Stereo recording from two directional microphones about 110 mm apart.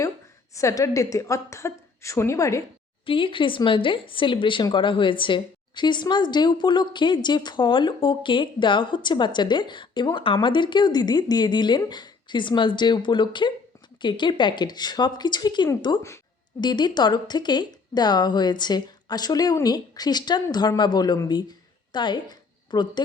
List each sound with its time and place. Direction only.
0.5 s a woman's voice: 30° left (ahead or behind)
3.1 s a woman's voice: 50° left (ahead or behind)